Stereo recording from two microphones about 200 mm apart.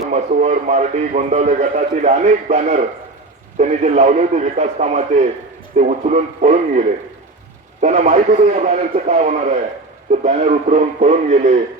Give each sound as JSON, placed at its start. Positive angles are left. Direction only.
{"t": 0.1, "sound": "a man's voice", "side_deg": -35}